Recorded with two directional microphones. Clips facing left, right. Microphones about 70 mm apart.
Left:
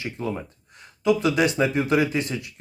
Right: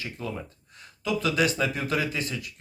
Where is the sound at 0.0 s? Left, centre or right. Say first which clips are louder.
Left 5 dB; left.